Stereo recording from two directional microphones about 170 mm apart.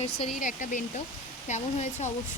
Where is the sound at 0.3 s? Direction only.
50° left (ahead or behind).